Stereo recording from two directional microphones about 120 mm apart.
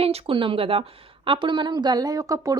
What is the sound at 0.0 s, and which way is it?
A woman's voice, 50° right (ahead or behind).